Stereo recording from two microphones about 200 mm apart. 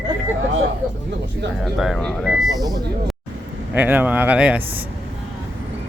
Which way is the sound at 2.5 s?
20° right (ahead or behind).